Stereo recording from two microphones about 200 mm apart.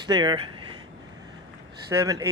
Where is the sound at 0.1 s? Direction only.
20° right (ahead or behind).